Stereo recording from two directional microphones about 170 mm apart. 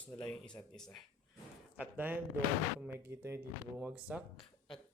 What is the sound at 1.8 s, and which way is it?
Speech, 10° right (ahead or behind).